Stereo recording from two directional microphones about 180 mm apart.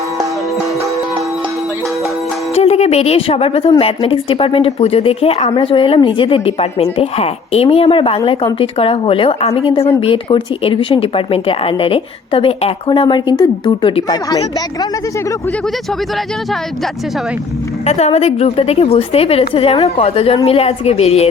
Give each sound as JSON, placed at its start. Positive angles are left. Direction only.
{"t": 2.6, "sound": "a sound", "side_deg": 35}
{"t": 3.8, "sound": "speech", "side_deg": 30}
{"t": 16.1, "sound": "speech", "side_deg": 0}
{"t": 17.8, "sound": "speech", "side_deg": 35}